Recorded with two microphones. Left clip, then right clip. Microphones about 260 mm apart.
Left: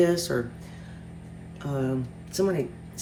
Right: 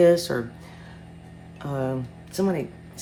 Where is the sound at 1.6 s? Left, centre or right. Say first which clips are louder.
Right 1 dB; right.